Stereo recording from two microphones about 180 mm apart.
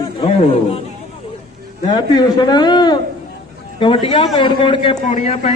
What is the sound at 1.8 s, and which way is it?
A man's voice, 25° left (ahead or behind).